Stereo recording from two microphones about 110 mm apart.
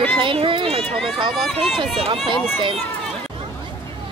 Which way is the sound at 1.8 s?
55° right (ahead or behind).